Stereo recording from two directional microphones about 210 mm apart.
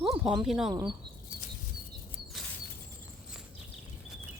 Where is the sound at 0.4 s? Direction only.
Centre (ahead or behind).